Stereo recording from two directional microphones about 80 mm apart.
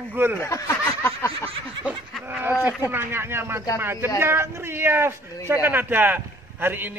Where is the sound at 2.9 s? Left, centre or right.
Right.